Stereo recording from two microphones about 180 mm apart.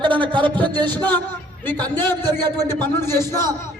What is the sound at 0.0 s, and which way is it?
Speech, 25° right (ahead or behind).